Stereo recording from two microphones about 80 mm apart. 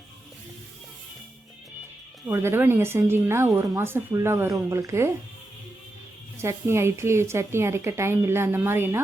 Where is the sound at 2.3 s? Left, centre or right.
Right.